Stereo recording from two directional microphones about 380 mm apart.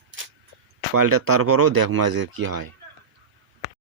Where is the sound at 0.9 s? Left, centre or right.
Right.